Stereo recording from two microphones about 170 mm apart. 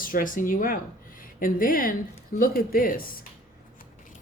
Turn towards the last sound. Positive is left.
turn(degrees=55)  # may be behind; listen again after turning